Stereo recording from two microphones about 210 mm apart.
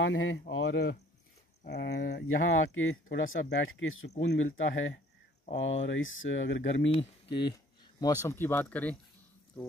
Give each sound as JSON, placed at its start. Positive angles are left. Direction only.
{"t": 0.0, "sound": "speech", "side_deg": 60}
{"t": 2.2, "sound": "speech", "side_deg": 70}
{"t": 7.0, "sound": "speech", "side_deg": 25}